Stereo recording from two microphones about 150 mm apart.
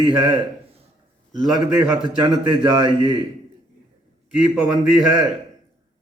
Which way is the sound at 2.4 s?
25° right (ahead or behind).